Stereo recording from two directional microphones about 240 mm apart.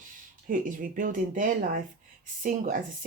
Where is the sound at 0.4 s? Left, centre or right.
Right.